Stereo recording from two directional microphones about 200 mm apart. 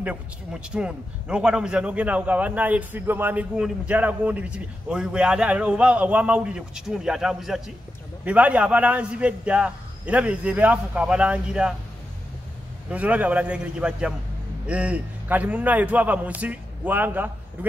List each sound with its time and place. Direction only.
0.0 s a man's voice: 5° right (ahead or behind)
12.9 s a man's voice: 5° right (ahead or behind)